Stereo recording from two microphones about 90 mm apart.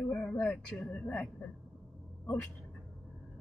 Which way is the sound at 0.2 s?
15° left (ahead or behind).